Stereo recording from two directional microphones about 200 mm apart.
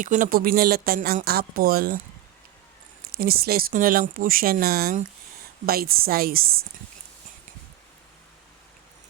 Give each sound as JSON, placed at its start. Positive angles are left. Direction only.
{"t": 0.0, "sound": "speech", "side_deg": -40}
{"t": 3.1, "sound": "speech", "side_deg": -50}